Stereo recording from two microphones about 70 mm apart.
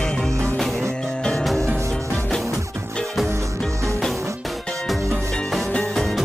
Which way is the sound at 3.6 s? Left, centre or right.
Right.